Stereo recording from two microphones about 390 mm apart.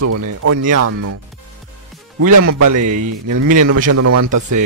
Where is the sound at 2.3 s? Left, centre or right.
Right.